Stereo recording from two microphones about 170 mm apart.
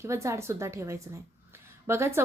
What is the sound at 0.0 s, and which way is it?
A woman's voice, 15° right (ahead or behind).